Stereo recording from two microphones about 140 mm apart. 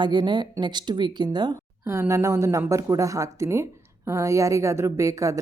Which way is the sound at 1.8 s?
20° right (ahead or behind).